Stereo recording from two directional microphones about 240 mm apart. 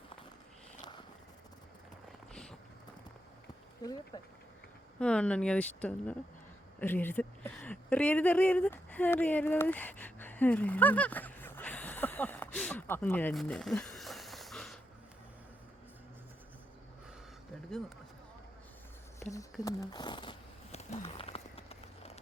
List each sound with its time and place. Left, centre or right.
0.8 s vehicle: centre
2.3 s clip-clop: centre
3.8 s speech: centre
4.9 s speech: centre
17.7 s speech: centre
19.2 s speech: centre
21.0 s a sound: left